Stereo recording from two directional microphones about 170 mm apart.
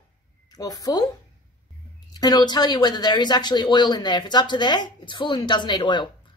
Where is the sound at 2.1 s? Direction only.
25° left (ahead or behind).